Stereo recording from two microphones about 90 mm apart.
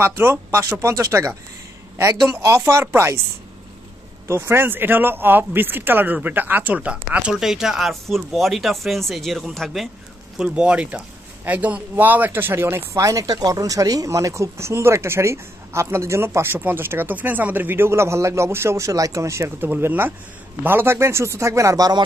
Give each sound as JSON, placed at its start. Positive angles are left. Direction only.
{"t": 0.0, "sound": "a man's voice", "side_deg": -25}
{"t": 4.3, "sound": "speech", "side_deg": -30}
{"t": 10.3, "sound": "a man's voice", "side_deg": -10}